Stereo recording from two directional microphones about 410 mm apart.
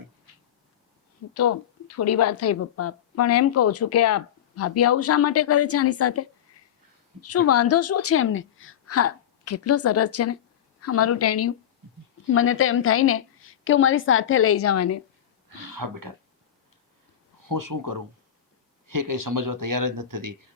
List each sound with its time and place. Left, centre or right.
1.3 s a woman's voice: left
15.5 s speech: right
17.4 s speech: right